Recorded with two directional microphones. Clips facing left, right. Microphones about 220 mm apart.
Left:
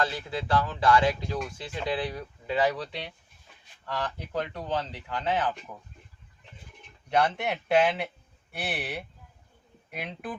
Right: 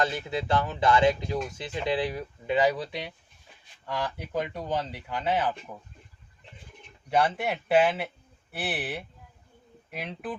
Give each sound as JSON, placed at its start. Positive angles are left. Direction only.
{"t": 0.0, "sound": "speech", "side_deg": -20}
{"t": 7.1, "sound": "speech", "side_deg": -5}